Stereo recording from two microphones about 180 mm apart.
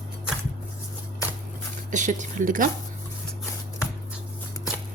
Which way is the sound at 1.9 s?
45° right (ahead or behind).